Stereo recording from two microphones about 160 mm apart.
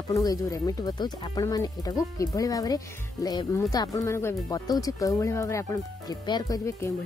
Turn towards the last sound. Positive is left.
turn(degrees=20)  # may be behind; listen again after turning